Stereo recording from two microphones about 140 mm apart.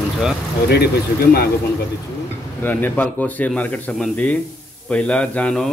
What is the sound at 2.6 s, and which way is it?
A man's voice, 15° left (ahead or behind).